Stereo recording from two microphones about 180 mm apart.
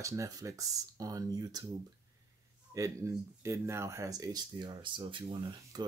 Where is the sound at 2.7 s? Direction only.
15° right (ahead or behind).